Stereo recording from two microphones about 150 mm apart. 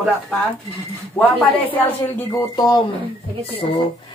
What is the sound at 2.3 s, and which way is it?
Speech, 25° left (ahead or behind).